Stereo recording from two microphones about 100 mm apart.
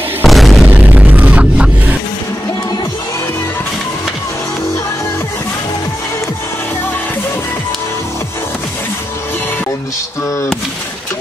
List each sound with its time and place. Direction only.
0.2 s music: centre (ahead or behind)
0.7 s music: 15° right (ahead or behind)